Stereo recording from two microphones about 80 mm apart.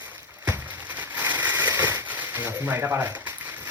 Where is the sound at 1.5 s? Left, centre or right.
Right.